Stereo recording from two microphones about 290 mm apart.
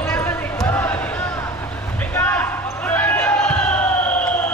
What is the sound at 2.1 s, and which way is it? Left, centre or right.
Basketball bounce, centre.